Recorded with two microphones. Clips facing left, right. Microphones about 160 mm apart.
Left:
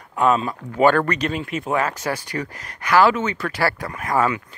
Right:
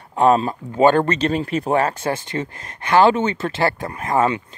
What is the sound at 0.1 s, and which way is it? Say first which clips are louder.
Speech: right 3 dB; 35° right (ahead or behind).